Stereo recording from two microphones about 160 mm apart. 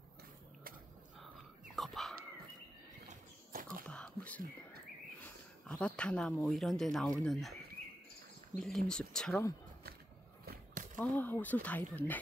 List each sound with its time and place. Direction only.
1.8 s whispering: centre (ahead or behind)
3.1 s a sound: 60° right (ahead or behind)
3.8 s whispering: 5° left (ahead or behind)
5.2 s speech: 5° left (ahead or behind)
8.5 s speech: 5° left (ahead or behind)
10.4 s a sound: 65° right (ahead or behind)
11.0 s speech: 10° left (ahead or behind)